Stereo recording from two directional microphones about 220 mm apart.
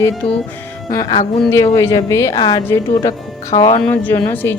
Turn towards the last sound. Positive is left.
turn(degrees=10)  # may be behind; listen again after turning